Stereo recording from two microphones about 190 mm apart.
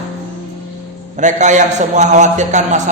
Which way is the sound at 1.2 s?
40° right (ahead or behind).